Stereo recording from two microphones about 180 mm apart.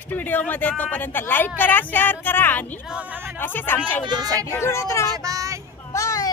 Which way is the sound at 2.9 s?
5° right (ahead or behind).